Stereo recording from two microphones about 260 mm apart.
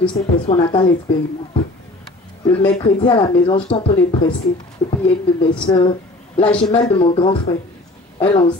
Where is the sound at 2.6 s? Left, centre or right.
Centre.